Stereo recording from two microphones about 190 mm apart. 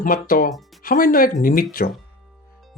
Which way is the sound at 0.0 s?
50° left (ahead or behind).